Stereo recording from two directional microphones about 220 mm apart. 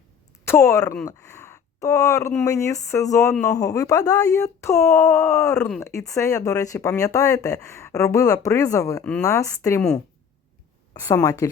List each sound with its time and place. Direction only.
0.4 s speech: 10° left (ahead or behind)
11.0 s speech: 15° left (ahead or behind)